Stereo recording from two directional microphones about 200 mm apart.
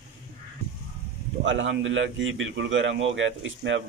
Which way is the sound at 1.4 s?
70° right (ahead or behind).